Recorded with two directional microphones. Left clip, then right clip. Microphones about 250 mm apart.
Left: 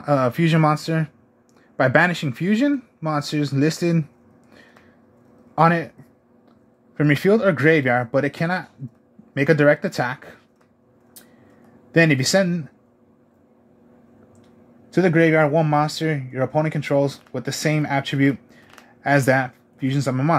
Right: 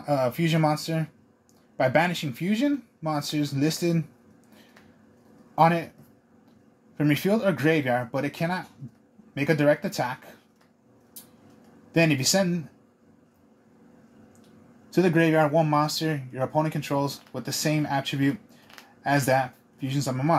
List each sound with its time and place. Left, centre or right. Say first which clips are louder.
0.0 s speech: left 5 dB; left
5.6 s speech: left 3 dB; left
7.0 s speech: left 7 dB; left
11.9 s speech: left 6 dB; left
14.9 s speech: left 5 dB; left